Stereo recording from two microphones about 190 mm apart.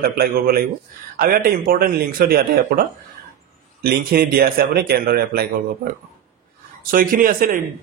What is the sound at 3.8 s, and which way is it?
Speech, 55° right (ahead or behind).